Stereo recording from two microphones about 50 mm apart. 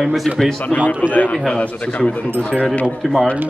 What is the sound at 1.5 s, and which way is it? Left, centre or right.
Speech, left.